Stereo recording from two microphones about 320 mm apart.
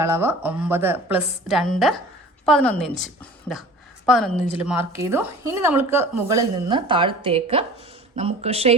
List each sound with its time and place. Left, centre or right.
0.0 s a woman's voice: centre